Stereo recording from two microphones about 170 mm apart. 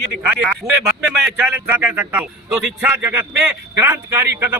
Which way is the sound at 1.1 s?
Centre (ahead or behind).